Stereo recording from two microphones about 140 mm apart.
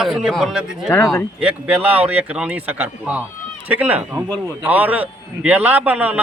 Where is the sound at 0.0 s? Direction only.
5° right (ahead or behind).